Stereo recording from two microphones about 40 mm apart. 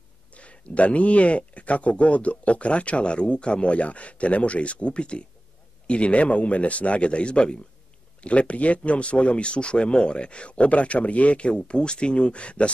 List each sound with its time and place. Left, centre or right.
0.3 s speech: left